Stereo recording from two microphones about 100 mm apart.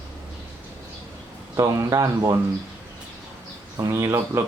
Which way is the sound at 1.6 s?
35° right (ahead or behind).